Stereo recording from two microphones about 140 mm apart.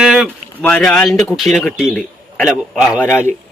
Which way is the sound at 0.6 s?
10° left (ahead or behind).